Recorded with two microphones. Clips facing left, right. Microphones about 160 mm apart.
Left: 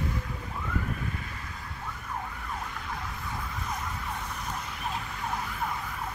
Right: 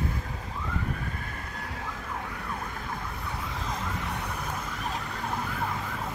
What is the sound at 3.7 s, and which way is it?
Emergency vehicle, 75° right (ahead or behind).